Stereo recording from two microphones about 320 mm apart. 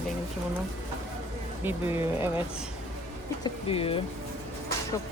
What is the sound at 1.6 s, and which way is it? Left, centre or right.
Speech, centre.